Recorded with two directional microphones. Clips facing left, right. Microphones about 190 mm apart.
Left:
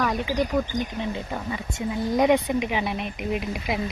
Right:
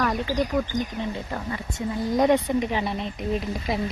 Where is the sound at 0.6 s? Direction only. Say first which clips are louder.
Even; centre (ahead or behind).